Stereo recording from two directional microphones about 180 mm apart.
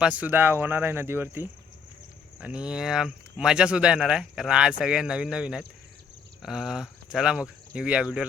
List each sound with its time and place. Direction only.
0.0 s speech: 10° right (ahead or behind)